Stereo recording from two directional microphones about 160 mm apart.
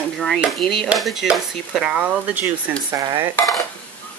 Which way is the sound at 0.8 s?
Centre (ahead or behind).